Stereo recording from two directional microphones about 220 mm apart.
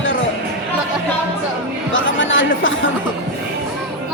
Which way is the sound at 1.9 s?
60° left (ahead or behind).